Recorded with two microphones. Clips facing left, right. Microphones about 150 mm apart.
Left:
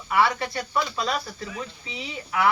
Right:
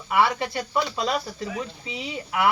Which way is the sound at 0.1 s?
20° right (ahead or behind).